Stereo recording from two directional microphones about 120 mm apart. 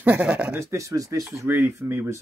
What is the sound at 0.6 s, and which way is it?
Speech, 25° right (ahead or behind).